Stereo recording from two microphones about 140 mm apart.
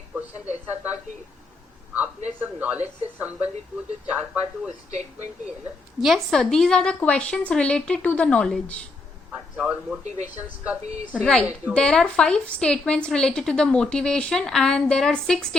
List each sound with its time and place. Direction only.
1.9 s a man's voice: 10° right (ahead or behind)
4.9 s speech: 55° right (ahead or behind)
6.0 s a woman's voice: centre (ahead or behind)
9.6 s a woman's voice: 5° right (ahead or behind)
11.1 s a woman's voice: 5° left (ahead or behind)